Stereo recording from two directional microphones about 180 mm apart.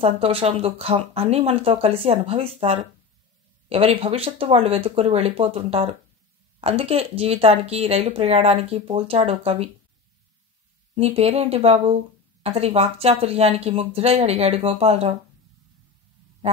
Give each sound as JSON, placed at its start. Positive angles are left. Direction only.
{"t": 0.0, "sound": "speech", "side_deg": -30}
{"t": 11.0, "sound": "speech", "side_deg": -35}